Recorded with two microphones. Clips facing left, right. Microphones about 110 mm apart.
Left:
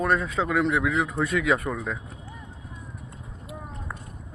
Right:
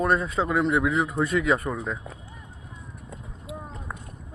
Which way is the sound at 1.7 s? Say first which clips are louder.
Even; 10° right (ahead or behind).